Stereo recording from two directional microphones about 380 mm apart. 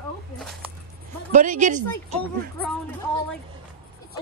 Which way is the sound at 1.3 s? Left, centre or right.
Centre.